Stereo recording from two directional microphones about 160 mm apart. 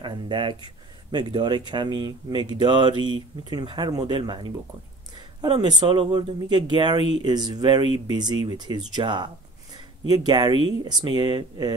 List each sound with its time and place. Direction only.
0.0 s speech: 30° right (ahead or behind)